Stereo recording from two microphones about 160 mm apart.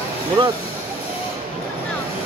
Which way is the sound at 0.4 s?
30° right (ahead or behind).